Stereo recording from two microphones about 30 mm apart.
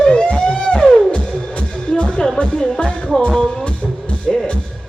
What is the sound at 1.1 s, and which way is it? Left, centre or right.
Music, left.